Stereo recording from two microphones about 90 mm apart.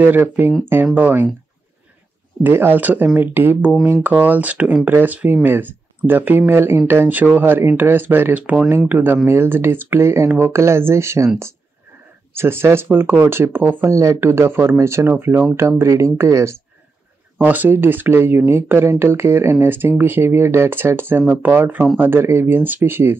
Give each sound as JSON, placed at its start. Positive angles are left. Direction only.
{"t": 0.0, "sound": "speech", "side_deg": -25}
{"t": 2.4, "sound": "speech", "side_deg": -25}
{"t": 12.4, "sound": "speech", "side_deg": -25}
{"t": 17.4, "sound": "speech", "side_deg": -20}